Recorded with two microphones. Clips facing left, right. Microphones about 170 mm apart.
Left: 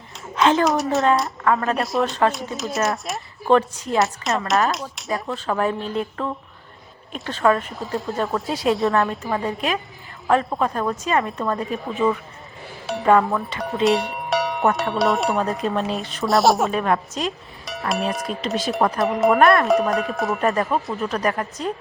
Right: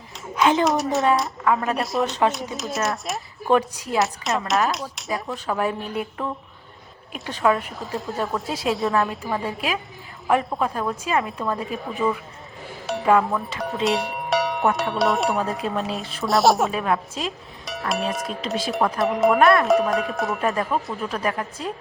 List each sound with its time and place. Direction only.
0.6 s speech: centre (ahead or behind)
2.0 s speech: 20° right (ahead or behind)
2.3 s speech: centre (ahead or behind)
7.4 s speech: centre (ahead or behind)